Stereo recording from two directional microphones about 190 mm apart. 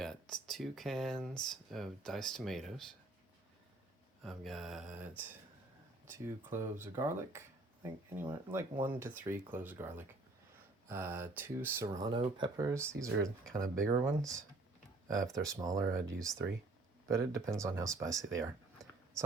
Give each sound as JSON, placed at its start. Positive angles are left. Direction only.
{"t": 0.0, "sound": "speech", "side_deg": 5}
{"t": 4.2, "sound": "speech", "side_deg": 0}
{"t": 18.3, "sound": "a sound", "side_deg": -15}